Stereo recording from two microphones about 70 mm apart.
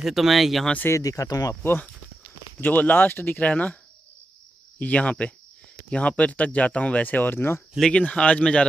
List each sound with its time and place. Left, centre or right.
0.0 s speech: centre
0.9 s speech: left
1.5 s speech: left
4.7 s speech: left
8.0 s speech: centre